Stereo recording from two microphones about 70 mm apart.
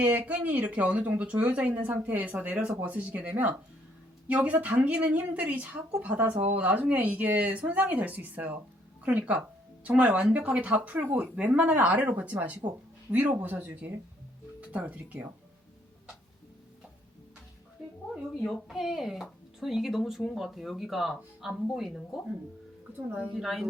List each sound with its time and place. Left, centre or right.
0.0 s a woman's voice: right
18.7 s speech: centre
23.0 s a woman's voice: right
23.3 s speech: centre